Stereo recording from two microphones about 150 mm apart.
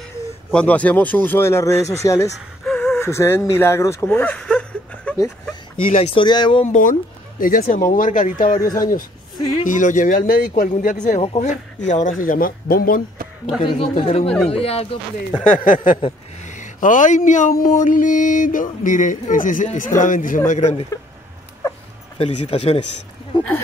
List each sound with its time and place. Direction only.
0.5 s speech: 10° left (ahead or behind)
2.6 s gasp: 5° left (ahead or behind)
3.1 s speech: 15° left (ahead or behind)
5.9 s speech: 35° left (ahead or behind)
6.6 s speech: 60° left (ahead or behind)
9.4 s speech: 25° left (ahead or behind)
9.7 s speech: 60° left (ahead or behind)
11.1 s speech: 45° left (ahead or behind); by 13.0 s 80° left
13.6 s speech: 35° left (ahead or behind)
15.5 s speech: 60° left (ahead or behind)
22.2 s speech: 40° left (ahead or behind)